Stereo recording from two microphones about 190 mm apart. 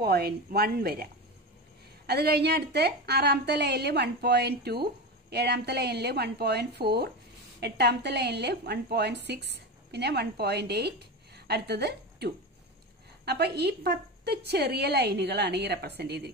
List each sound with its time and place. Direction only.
0.0 s a woman's voice: 55° right (ahead or behind)
2.0 s a woman's voice: 60° right (ahead or behind)